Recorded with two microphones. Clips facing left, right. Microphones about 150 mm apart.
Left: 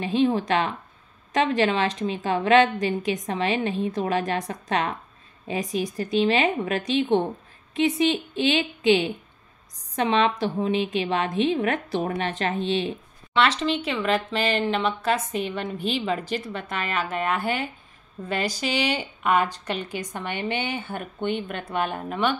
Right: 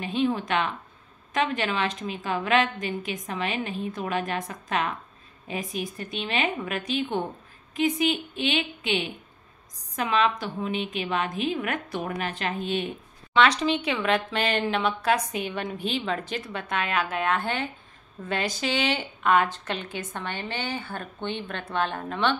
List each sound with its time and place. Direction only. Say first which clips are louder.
0.0 s a woman's voice: left 4 dB; 30° left (ahead or behind)
13.3 s a woman's voice: right 1 dB; centre (ahead or behind)